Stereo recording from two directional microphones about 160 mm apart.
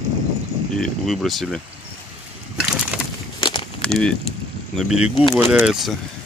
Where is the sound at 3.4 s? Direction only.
30° left (ahead or behind).